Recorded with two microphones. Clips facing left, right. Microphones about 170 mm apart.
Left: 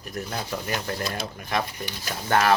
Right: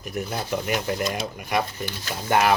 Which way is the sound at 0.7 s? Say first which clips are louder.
Right 5 dB; 15° right (ahead or behind).